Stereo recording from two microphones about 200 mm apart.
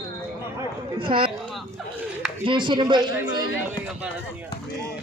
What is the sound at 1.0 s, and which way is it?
Speech, 25° right (ahead or behind).